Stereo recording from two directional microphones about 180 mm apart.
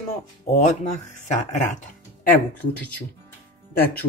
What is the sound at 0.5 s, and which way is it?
Speech, 40° left (ahead or behind).